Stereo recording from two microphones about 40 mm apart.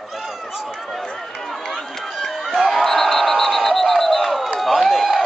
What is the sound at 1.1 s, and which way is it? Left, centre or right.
Run, centre.